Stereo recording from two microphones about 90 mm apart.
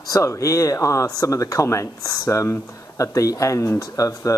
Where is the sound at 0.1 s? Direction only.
35° left (ahead or behind).